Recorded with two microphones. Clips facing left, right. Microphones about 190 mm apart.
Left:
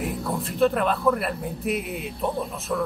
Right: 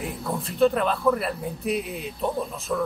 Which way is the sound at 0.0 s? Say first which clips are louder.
Left 2 dB; centre (ahead or behind).